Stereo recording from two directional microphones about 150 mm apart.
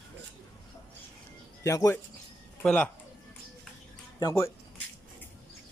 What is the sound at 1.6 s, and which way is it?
Speech, 20° left (ahead or behind).